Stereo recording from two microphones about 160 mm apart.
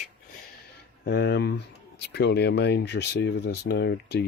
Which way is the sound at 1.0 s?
80° left.